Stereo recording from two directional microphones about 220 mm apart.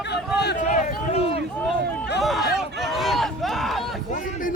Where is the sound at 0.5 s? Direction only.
35° left (ahead or behind).